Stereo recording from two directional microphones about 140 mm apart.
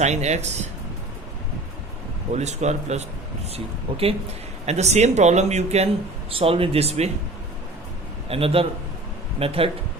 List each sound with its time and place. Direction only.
0.0 s speech: 55° right (ahead or behind)
2.3 s speech: 55° right (ahead or behind)
3.5 s speech: 45° right (ahead or behind)
8.3 s speech: 45° right (ahead or behind)